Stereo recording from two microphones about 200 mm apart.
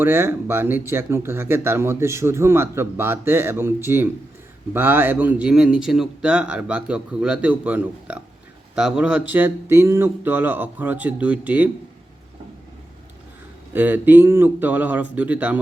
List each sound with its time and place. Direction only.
0.0 s speech: 10° right (ahead or behind)
13.7 s speech: 10° right (ahead or behind)